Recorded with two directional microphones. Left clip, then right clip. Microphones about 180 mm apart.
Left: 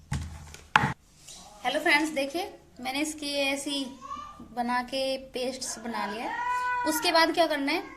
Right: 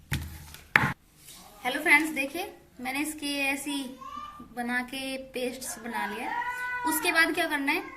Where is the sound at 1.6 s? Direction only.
55° left (ahead or behind).